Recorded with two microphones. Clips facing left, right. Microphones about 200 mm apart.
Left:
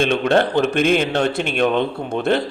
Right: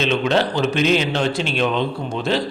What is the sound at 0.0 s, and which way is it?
A man's voice, 50° left (ahead or behind).